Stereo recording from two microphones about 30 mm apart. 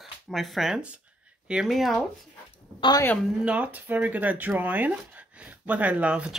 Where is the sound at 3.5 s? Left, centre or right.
Right.